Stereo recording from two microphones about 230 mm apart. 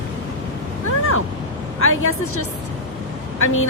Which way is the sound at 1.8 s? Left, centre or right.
Left.